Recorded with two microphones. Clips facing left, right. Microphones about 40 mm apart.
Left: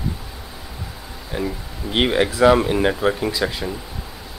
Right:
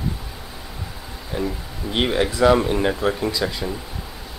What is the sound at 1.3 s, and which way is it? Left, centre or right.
Speech, centre.